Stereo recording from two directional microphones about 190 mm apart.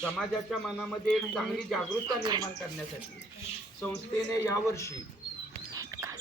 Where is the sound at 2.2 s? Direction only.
20° right (ahead or behind).